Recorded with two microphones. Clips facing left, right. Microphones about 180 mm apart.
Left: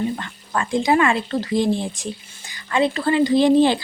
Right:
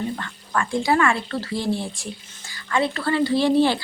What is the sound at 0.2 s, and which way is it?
Speech, 20° left (ahead or behind).